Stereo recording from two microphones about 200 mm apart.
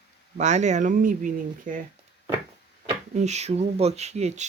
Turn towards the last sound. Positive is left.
turn(degrees=-35)  # may be behind; listen again after turning